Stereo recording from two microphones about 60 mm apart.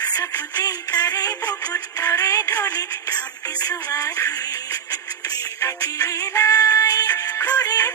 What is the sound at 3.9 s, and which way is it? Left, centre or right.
Music, left.